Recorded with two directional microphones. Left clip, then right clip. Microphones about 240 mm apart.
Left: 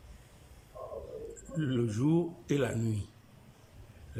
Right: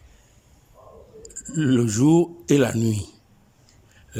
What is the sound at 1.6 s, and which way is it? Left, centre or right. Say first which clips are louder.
Speech: right 12 dB; right.